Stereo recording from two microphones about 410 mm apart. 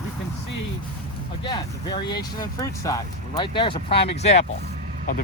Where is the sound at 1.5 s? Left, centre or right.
Centre.